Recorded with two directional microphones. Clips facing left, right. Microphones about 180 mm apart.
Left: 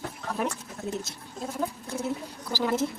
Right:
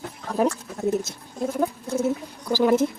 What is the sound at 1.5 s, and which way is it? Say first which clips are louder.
Speech: right 6 dB; 45° right (ahead or behind).